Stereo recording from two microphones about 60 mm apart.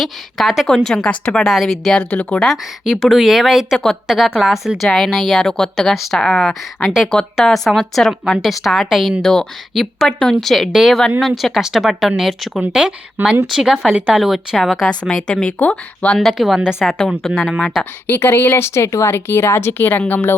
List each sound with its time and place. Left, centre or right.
0.0 s speech: centre
1.0 s a woman's voice: centre
1.5 s speech: centre
2.0 s speech: left
2.8 s a woman's voice: centre
5.9 s a woman's voice: centre
13.2 s speech: right
13.6 s speech: centre
14.8 s a woman's voice: centre
16.1 s speech: centre
18.1 s speech: left
19.1 s speech: left